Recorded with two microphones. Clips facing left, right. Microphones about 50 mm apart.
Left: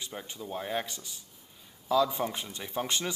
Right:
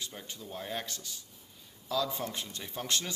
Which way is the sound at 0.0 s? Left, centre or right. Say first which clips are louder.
Left 3 dB; centre.